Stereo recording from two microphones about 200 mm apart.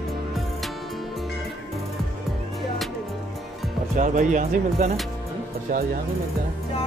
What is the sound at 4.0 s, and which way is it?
Speech, 40° right (ahead or behind).